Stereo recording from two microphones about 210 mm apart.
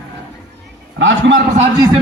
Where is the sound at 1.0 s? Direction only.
60° right (ahead or behind).